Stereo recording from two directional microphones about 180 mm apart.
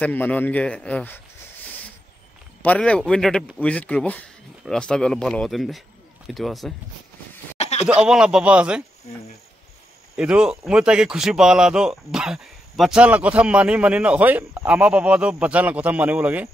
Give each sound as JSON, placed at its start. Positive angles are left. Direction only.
{"t": 0.0, "sound": "a man's voice", "side_deg": 10}
{"t": 2.6, "sound": "speech", "side_deg": 5}
{"t": 7.5, "sound": "a sound", "side_deg": 35}
{"t": 7.8, "sound": "speech", "side_deg": -5}
{"t": 10.1, "sound": "speech", "side_deg": -5}